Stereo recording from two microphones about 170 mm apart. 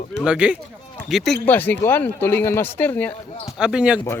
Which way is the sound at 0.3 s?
5° right (ahead or behind).